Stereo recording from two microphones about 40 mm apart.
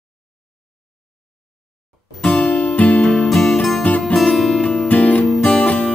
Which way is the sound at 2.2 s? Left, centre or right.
Left.